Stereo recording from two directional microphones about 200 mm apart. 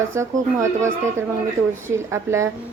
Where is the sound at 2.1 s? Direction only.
15° right (ahead or behind).